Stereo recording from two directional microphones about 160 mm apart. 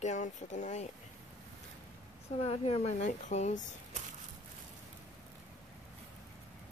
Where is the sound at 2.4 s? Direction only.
40° left (ahead or behind).